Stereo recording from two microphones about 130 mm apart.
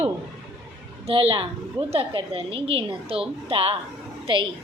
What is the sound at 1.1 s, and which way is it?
A woman's voice, 45° right (ahead or behind).